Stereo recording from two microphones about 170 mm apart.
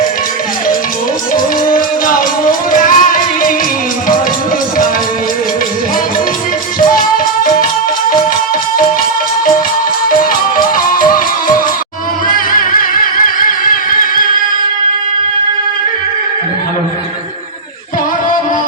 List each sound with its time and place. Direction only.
1.6 s music: 55° left (ahead or behind)
10.9 s music: 55° left (ahead or behind)